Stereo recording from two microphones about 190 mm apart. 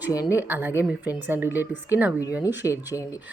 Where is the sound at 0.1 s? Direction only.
20° left (ahead or behind).